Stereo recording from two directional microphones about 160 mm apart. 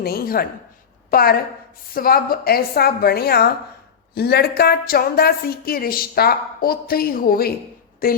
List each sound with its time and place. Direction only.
0.0 s a woman's voice: 70° left (ahead or behind)